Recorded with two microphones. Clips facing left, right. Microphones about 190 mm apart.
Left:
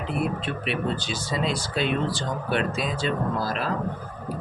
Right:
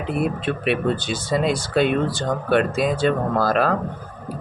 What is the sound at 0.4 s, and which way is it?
Speech, 55° right (ahead or behind).